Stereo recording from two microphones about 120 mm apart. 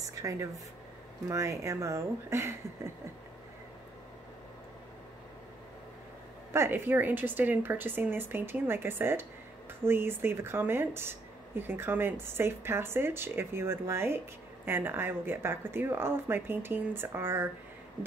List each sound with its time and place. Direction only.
0.0 s a sound: 25° right (ahead or behind)
1.3 s speech: 25° right (ahead or behind)
6.5 s speech: 20° right (ahead or behind)